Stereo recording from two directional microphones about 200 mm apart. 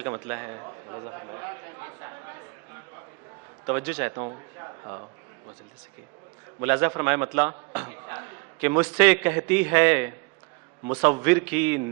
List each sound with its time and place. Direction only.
0.0 s a man's voice: 15° right (ahead or behind)
3.7 s a man's voice: 15° right (ahead or behind)
6.6 s a man's voice: 15° right (ahead or behind)
7.9 s a sound: 15° right (ahead or behind)
8.6 s a man's voice: 10° right (ahead or behind)